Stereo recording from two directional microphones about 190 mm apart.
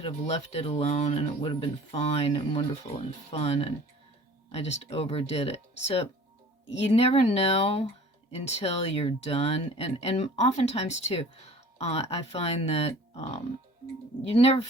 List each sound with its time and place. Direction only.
0.6 s speech: 35° left (ahead or behind)